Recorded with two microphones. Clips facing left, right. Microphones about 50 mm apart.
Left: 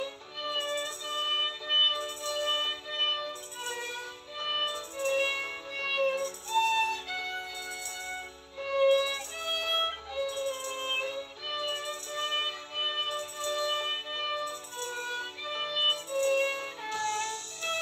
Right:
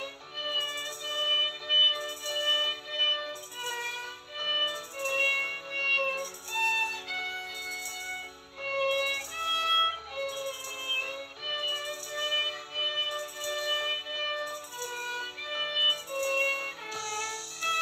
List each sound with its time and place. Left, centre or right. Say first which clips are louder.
0.0 s music: left 1 dB; right